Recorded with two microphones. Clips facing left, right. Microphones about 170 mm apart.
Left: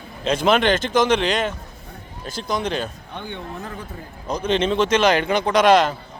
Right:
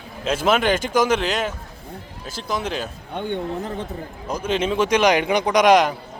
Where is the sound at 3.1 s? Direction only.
55° right (ahead or behind).